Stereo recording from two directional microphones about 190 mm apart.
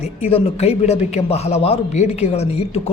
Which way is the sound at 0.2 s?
30° left (ahead or behind).